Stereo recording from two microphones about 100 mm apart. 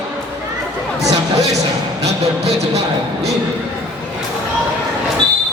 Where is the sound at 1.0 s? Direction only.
35° right (ahead or behind).